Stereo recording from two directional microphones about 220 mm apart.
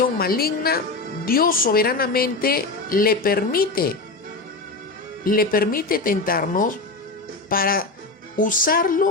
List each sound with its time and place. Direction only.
0.0 s a woman's voice: 40° left (ahead or behind)
5.2 s speech: 40° left (ahead or behind)